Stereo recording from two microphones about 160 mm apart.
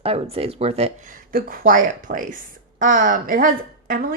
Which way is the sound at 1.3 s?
65° right (ahead or behind).